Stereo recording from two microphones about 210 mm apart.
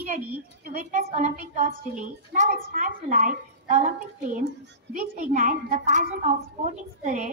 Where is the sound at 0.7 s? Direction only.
40° right (ahead or behind).